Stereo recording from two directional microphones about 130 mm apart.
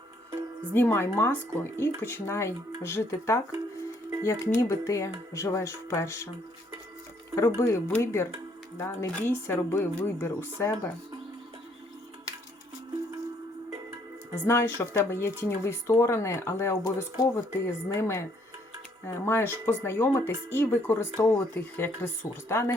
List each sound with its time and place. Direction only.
0.7 s speech: 15° left (ahead or behind)
7.3 s speech: 25° left (ahead or behind)
14.4 s speech: 20° left (ahead or behind)